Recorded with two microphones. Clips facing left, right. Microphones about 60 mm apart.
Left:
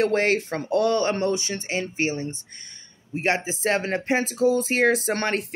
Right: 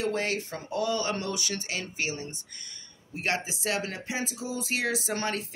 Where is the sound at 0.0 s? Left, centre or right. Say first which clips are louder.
Left 8 dB; left.